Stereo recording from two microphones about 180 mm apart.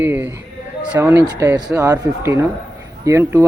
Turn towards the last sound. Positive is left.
turn(degrees=-15)  # may be behind; listen again after turning